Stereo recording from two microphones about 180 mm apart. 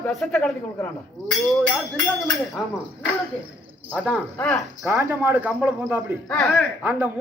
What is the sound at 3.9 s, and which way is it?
Speech, 10° right (ahead or behind).